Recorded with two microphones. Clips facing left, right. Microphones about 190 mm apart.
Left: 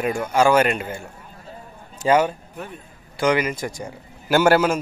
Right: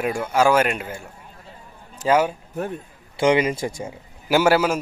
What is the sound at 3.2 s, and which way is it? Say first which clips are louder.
Speech: right 2 dB; 25° right (ahead or behind).